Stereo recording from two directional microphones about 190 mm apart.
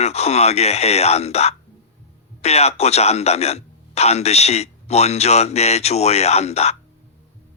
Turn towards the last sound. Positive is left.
turn(degrees=35)  # may be behind; listen again after turning